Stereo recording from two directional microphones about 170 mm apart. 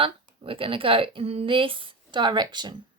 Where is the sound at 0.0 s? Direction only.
30° right (ahead or behind).